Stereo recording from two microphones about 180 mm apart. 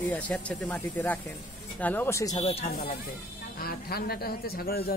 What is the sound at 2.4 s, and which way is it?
Speech, 35° left (ahead or behind).